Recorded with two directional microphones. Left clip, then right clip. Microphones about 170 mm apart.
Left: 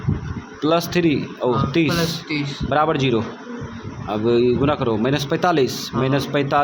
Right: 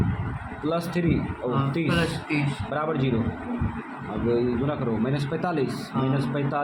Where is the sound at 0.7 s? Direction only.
40° left (ahead or behind).